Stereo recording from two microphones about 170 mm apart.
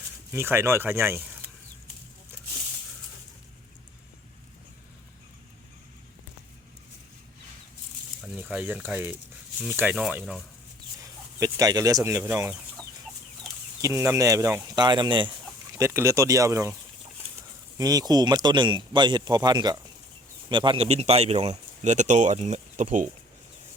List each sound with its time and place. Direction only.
0.3 s speech: 15° right (ahead or behind)
8.2 s speech: 5° right (ahead or behind)
11.0 s speech: 20° right (ahead or behind)
13.8 s speech: 15° right (ahead or behind)
15.8 s speech: 15° right (ahead or behind)
17.7 s speech: 20° right (ahead or behind); by 23.0 s 45° right (ahead or behind)